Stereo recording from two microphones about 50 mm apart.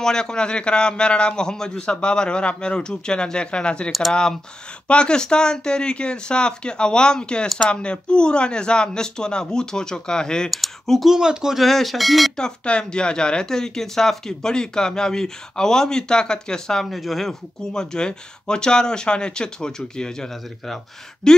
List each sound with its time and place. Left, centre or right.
0.0 s speech: centre
10.5 s speech: centre
11.1 s speech: centre
11.6 s speech: centre
12.4 s speech: centre
16.9 s speech: centre